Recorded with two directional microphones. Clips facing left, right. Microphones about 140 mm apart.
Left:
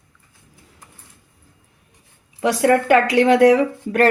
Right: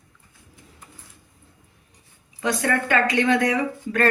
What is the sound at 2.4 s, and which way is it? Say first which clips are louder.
Speech: left 7 dB; 15° left (ahead or behind).